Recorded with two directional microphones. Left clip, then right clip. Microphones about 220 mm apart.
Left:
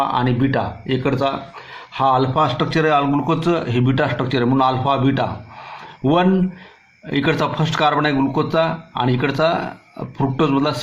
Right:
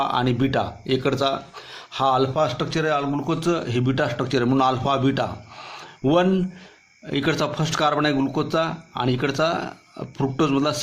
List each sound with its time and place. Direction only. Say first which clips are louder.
0.0 s speech: left 3 dB; 35° right (ahead or behind)